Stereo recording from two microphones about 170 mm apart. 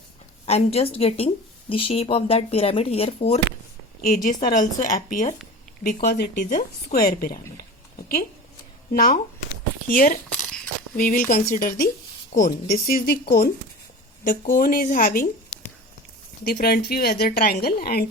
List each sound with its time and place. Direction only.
0.4 s speech: 35° left (ahead or behind)
4.0 s a woman's voice: 50° left (ahead or behind)
7.5 s a sound: 60° left (ahead or behind)
8.9 s a woman's voice: 55° left (ahead or behind)
16.4 s a woman's voice: 60° left (ahead or behind)